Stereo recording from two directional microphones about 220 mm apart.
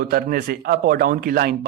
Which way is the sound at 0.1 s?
45° right (ahead or behind).